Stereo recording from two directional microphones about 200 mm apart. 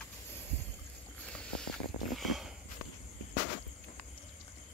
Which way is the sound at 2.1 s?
Centre (ahead or behind).